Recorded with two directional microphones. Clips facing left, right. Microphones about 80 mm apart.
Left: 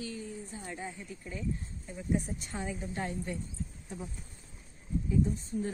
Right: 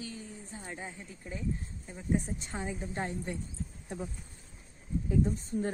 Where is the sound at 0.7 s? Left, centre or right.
Centre.